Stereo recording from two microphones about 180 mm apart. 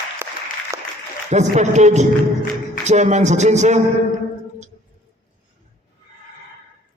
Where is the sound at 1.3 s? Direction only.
40° right (ahead or behind).